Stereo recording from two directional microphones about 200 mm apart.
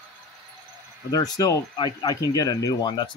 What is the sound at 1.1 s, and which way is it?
Speech, 20° left (ahead or behind).